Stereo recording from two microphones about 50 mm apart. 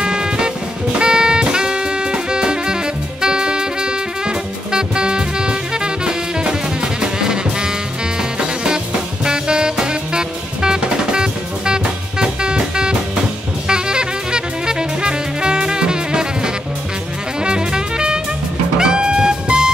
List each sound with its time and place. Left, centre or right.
0.0 s music: centre